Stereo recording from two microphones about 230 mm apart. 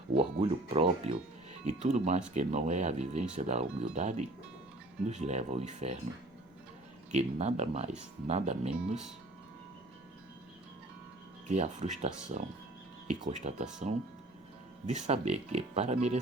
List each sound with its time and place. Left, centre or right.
0.2 s speech: right
7.1 s speech: right
11.4 s speech: right